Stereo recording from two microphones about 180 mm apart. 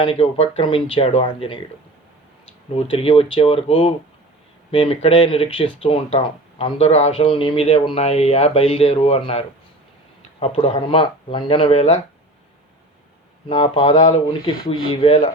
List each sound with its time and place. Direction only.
0.0 s speech: 30° left (ahead or behind)
2.7 s speech: 30° left (ahead or behind)
10.4 s speech: 30° left (ahead or behind)
13.5 s speech: 25° left (ahead or behind)